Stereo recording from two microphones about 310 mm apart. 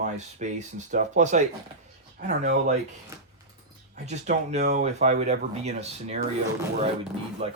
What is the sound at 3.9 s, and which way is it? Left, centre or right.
Speech, right.